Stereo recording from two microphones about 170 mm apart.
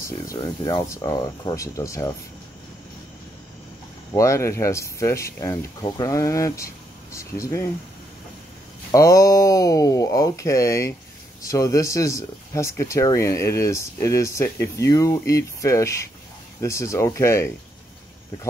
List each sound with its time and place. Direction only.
0.7 s speech: 20° left (ahead or behind)
4.1 s speech: 20° left (ahead or behind)
8.9 s speech: 20° left (ahead or behind)